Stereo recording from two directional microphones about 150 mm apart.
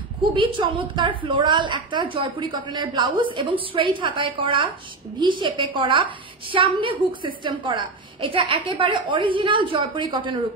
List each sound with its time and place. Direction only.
0.3 s a woman's voice: 35° right (ahead or behind)